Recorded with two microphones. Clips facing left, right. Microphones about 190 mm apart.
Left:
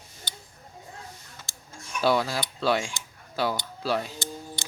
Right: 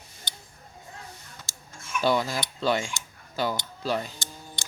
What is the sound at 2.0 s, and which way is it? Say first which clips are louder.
Speech: left 1 dB; 5° left (ahead or behind).